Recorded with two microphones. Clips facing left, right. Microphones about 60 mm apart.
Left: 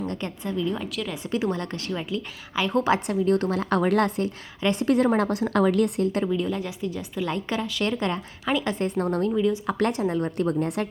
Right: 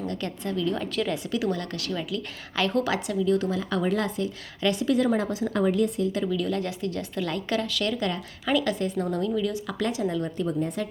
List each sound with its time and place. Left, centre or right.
0.0 s a woman's voice: left
0.8 s a woman's voice: centre
1.1 s a woman's voice: left
2.7 s a woman's voice: left
6.2 s speech: left
6.6 s a woman's voice: centre
9.0 s a woman's voice: left
9.3 s speech: left
9.7 s a woman's voice: left
10.0 s a woman's voice: left
10.3 s speech: left